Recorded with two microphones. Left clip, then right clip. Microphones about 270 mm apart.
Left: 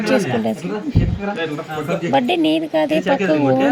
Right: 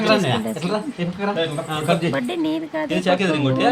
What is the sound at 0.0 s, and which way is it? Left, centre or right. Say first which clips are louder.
Speech: left 1 dB; centre.